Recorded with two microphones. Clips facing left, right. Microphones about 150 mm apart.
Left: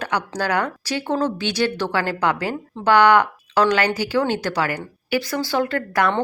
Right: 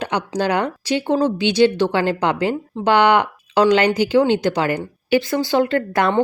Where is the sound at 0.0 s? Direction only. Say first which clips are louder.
Right 3 dB; 20° right (ahead or behind).